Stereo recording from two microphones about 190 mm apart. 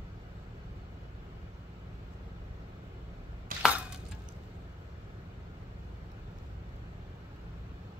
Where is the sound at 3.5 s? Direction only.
50° right (ahead or behind).